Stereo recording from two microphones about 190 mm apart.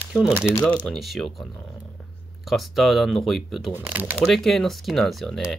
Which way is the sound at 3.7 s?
10° right (ahead or behind).